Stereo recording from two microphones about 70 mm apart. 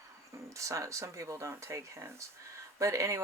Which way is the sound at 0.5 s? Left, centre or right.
Right.